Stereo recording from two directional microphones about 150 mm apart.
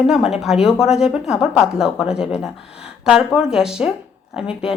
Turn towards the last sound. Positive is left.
turn(degrees=-5)  # may be behind; listen again after turning